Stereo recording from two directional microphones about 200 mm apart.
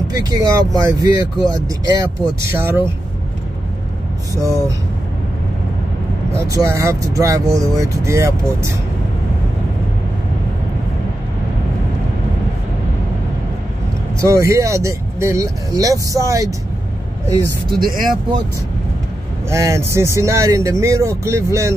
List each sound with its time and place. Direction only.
0.1 s speech: 20° right (ahead or behind)
4.4 s speech: 15° right (ahead or behind)
6.3 s speech: 15° right (ahead or behind)
14.2 s speech: 15° right (ahead or behind)
17.7 s speech: 45° right (ahead or behind)
19.5 s speech: 15° right (ahead or behind)